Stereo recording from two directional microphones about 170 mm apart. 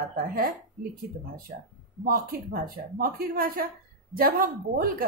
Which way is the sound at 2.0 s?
55° right (ahead or behind).